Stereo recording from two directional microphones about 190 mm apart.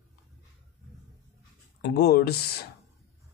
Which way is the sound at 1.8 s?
55° left (ahead or behind).